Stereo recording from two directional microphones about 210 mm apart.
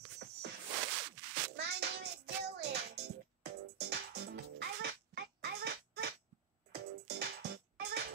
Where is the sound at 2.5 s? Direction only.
50° right (ahead or behind).